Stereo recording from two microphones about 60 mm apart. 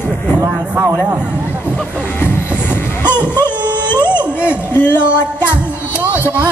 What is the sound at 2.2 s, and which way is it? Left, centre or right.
Music, left.